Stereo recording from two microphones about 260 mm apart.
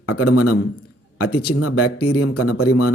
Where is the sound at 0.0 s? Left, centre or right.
Left.